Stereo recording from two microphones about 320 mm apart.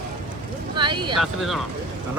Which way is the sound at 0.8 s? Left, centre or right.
Centre.